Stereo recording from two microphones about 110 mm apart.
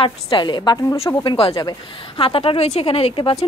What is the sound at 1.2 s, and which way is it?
Speech, 55° left (ahead or behind).